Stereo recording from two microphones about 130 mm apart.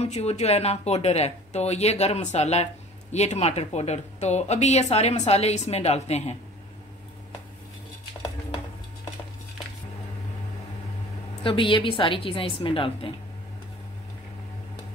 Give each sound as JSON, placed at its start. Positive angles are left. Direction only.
{"t": 0.0, "sound": "speech", "side_deg": 55}
{"t": 11.4, "sound": "a woman's voice", "side_deg": 40}